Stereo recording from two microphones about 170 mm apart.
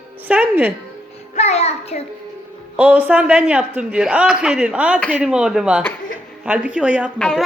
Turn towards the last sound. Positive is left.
turn(degrees=5)  # may be behind; listen again after turning